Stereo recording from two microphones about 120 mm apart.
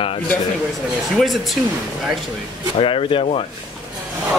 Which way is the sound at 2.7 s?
50° left (ahead or behind).